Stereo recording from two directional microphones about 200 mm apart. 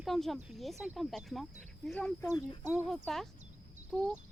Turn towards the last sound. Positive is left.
turn(degrees=5)  # may be behind; listen again after turning